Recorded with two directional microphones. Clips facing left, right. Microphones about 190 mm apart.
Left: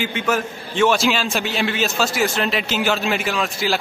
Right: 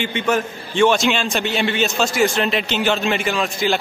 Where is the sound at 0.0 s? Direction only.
5° left (ahead or behind).